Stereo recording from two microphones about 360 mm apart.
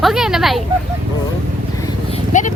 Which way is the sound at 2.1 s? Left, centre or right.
Left.